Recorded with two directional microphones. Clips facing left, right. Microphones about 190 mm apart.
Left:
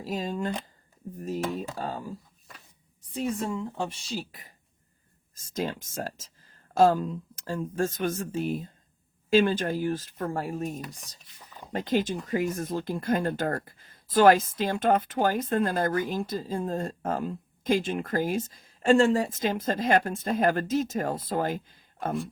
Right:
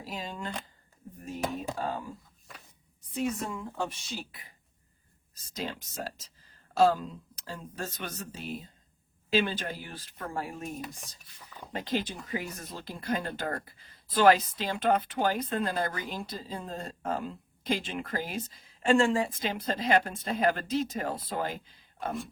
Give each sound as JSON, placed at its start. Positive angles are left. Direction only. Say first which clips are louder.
{"t": 0.0, "sound": "speech", "louder": "left 8 dB", "side_deg": 40}
{"t": 3.2, "sound": "a woman's voice", "louder": "left 3 dB", "side_deg": 30}